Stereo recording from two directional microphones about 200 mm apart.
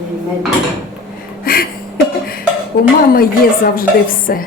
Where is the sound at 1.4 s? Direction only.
45° left (ahead or behind).